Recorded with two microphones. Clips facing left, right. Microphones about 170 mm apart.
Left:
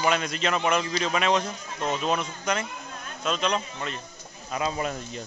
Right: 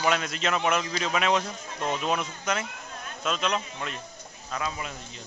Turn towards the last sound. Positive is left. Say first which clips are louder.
# left 8 dB
turn(degrees=50)  # may be behind; listen again after turning